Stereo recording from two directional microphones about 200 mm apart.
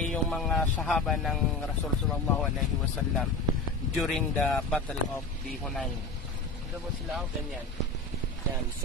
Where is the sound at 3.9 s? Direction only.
Centre (ahead or behind).